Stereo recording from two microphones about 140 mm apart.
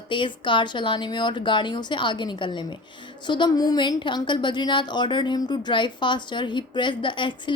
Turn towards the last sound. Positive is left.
turn(degrees=35)  # may be behind; listen again after turning